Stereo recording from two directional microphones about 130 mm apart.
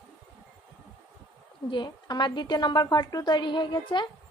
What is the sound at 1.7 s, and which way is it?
A woman's voice, 35° left (ahead or behind).